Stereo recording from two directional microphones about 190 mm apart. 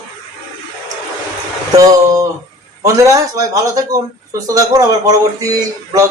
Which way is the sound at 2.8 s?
15° right (ahead or behind).